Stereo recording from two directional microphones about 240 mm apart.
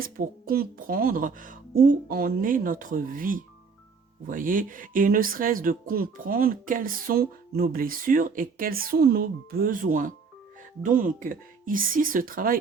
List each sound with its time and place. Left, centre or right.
0.0 s speech: right